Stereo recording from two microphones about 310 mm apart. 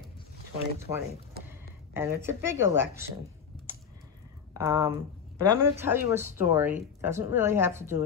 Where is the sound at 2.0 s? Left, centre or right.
Centre.